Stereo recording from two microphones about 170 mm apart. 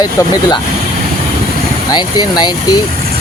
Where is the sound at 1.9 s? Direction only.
25° left (ahead or behind).